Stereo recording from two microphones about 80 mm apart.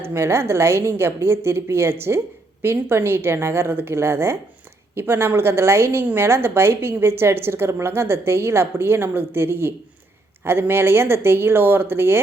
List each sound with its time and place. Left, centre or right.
0.0 s a woman's voice: right